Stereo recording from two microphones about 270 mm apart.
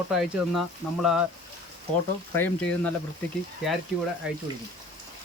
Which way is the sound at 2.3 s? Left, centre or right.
Centre.